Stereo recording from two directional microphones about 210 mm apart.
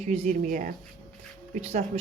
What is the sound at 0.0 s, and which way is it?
Speech, 30° right (ahead or behind).